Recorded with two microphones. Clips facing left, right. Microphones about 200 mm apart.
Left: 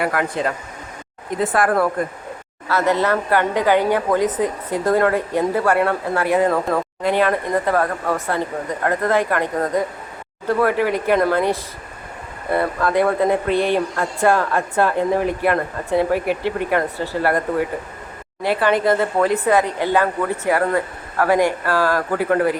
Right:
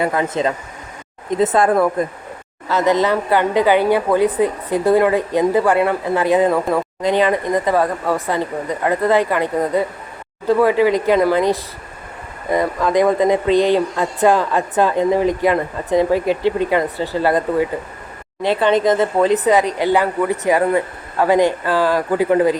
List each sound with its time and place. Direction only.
0.0 s speech: 20° right (ahead or behind)
12.5 s speech: 15° right (ahead or behind)
13.6 s speech: 10° left (ahead or behind)
14.0 s speech: 15° right (ahead or behind)
16.1 s speech: 10° left (ahead or behind)
16.6 s speech: 15° right (ahead or behind)
18.4 s speech: 20° right (ahead or behind)